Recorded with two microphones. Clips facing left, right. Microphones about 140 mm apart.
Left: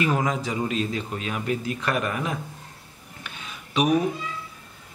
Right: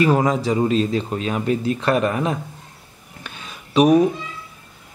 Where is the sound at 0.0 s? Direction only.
35° right (ahead or behind).